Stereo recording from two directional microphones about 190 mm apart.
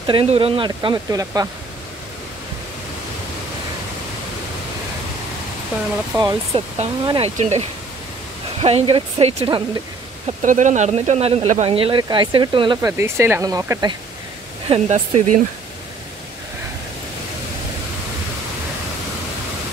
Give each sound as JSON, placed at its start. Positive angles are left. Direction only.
{"t": 0.0, "sound": "speech", "side_deg": -30}
{"t": 6.1, "sound": "speech", "side_deg": -20}
{"t": 6.5, "sound": "speech", "side_deg": -30}
{"t": 10.4, "sound": "speech", "side_deg": -40}
{"t": 12.9, "sound": "speech", "side_deg": -10}
{"t": 14.7, "sound": "speech", "side_deg": -35}